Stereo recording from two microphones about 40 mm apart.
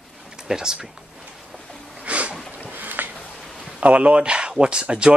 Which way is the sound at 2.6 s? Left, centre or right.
Right.